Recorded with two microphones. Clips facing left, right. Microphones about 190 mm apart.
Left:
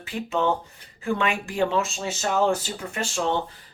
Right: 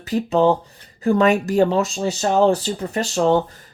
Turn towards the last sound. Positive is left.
turn(degrees=-40)  # may be behind; listen again after turning